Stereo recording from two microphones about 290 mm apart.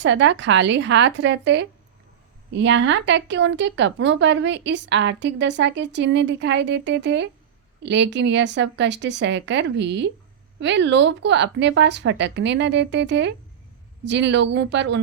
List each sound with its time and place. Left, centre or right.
0.0 s a woman's voice: right